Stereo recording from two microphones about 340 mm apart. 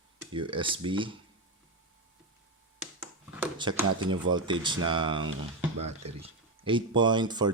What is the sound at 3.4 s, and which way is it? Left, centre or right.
Speech, centre.